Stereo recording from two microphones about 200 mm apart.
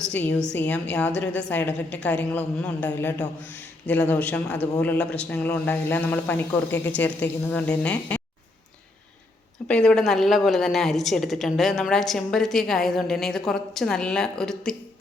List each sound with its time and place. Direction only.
0.0 s a woman's voice: 5° left (ahead or behind)
9.6 s a woman's voice: 5° left (ahead or behind)